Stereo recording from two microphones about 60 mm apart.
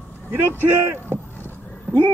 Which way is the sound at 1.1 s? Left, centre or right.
Right.